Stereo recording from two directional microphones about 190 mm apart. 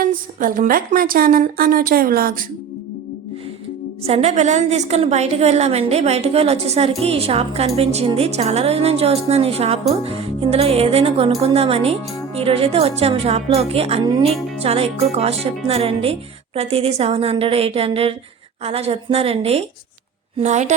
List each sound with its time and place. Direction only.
0.0 s a woman's voice: 45° right (ahead or behind)
4.0 s a woman's voice: 35° right (ahead or behind)